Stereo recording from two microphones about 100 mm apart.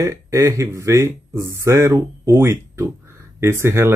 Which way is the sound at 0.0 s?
30° right (ahead or behind).